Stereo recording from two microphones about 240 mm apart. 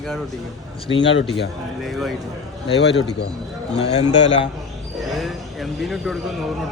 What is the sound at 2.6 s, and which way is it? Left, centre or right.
Speech, left.